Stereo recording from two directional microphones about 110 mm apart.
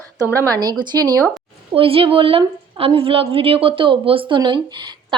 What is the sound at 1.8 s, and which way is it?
A woman's voice, 55° right (ahead or behind).